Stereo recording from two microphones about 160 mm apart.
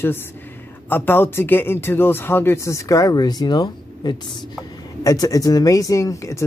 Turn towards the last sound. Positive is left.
turn(degrees=20)  # may be behind; listen again after turning